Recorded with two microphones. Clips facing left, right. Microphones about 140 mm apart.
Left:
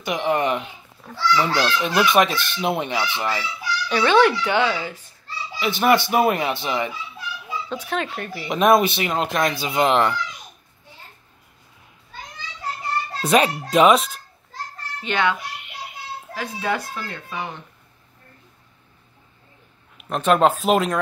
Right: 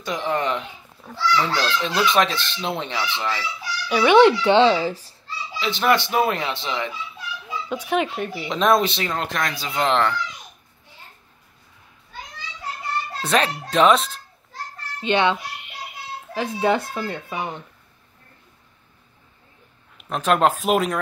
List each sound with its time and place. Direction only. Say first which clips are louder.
0.0 s speech: left 3 dB; 15° left (ahead or behind)
3.9 s a child's voice: right 3 dB; 15° right (ahead or behind); by 5.1 s 35° right (ahead or behind)
5.6 s speech: left 2 dB; 10° left (ahead or behind)
7.7 s speech: right 5 dB; 15° right (ahead or behind)
8.5 s speech: left 3 dB; 10° left (ahead or behind)
13.3 s speech: left 4 dB; 10° left (ahead or behind)
15.0 s a child's voice: right 3 dB; 20° right (ahead or behind)
16.3 s a child's voice: right 5 dB; 25° right (ahead or behind)
20.0 s speech: left 2 dB; centre (ahead or behind)